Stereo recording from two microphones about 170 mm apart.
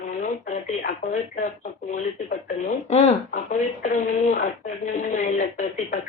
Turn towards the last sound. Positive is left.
turn(degrees=50)  # may be behind; listen again after turning